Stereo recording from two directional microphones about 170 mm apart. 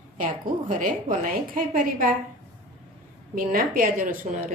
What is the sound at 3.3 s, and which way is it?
Speech, 60° right (ahead or behind).